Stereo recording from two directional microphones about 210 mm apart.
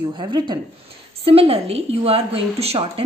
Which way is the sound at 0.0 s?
20° right (ahead or behind).